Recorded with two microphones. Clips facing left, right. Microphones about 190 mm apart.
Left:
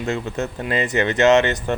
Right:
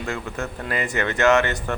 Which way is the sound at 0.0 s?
20° left (ahead or behind).